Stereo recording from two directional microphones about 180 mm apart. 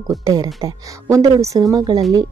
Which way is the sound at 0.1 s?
20° right (ahead or behind).